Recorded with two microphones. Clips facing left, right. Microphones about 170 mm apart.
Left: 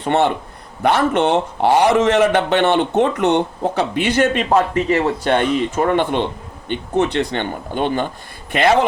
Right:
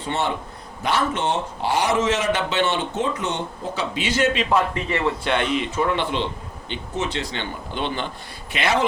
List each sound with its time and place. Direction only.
0.0 s a man's voice: 60° left (ahead or behind)